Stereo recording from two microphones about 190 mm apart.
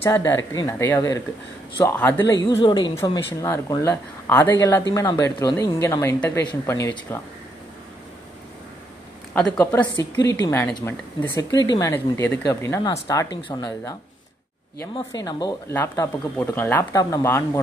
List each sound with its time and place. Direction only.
0.0 s speech: 15° left (ahead or behind)
9.3 s speech: 10° left (ahead or behind)
15.0 s speech: 20° left (ahead or behind)